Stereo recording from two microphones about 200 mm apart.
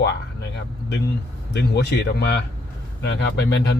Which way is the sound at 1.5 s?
55° left (ahead or behind).